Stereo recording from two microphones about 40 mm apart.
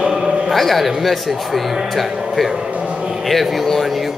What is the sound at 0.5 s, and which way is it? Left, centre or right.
A man's voice, centre.